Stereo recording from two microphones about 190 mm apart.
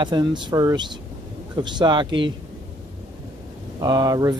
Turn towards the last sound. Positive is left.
turn(degrees=-20)  # may be behind; listen again after turning